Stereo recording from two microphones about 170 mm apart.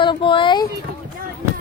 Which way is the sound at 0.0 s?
30° left (ahead or behind).